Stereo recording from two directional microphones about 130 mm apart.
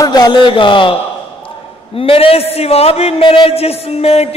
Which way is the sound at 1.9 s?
45° left (ahead or behind).